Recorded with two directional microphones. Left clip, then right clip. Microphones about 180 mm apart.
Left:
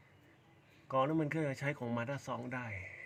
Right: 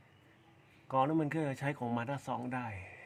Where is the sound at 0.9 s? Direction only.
20° right (ahead or behind).